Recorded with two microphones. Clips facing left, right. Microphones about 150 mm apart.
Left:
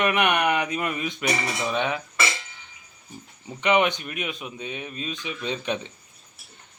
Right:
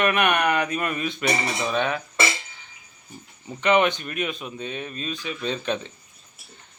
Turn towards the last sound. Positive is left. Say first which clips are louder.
# right 1 dB
turn(degrees=15)  # may be behind; listen again after turning